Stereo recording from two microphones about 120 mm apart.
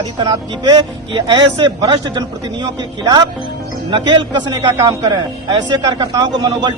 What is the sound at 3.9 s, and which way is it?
A woman's voice, 40° right (ahead or behind).